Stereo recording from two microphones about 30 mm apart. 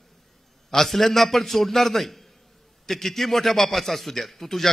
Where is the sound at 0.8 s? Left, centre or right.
Centre.